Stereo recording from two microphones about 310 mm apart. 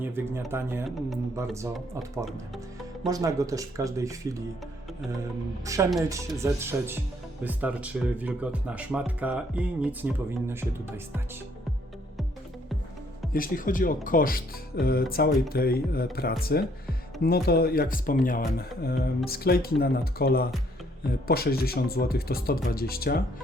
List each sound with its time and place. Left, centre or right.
0.0 s speech: centre
3.1 s speech: centre
5.6 s speech: centre
13.3 s speech: left